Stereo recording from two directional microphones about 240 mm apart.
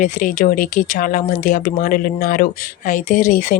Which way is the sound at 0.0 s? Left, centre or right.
Left.